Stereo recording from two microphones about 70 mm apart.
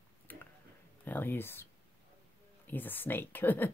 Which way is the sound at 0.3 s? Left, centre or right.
Left.